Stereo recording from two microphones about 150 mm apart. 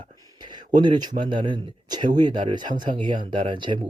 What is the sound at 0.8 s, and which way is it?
Speech, 30° right (ahead or behind).